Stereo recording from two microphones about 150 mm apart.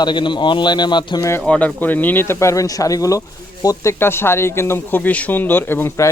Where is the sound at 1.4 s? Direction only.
5° left (ahead or behind).